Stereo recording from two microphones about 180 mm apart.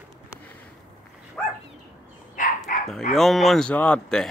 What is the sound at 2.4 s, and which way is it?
Dog, 45° left (ahead or behind).